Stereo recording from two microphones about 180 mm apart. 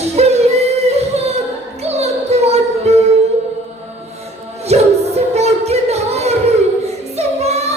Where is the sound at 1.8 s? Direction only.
35° right (ahead or behind).